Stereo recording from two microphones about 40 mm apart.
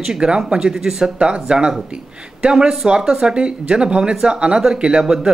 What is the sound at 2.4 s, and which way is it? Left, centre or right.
Speech, centre.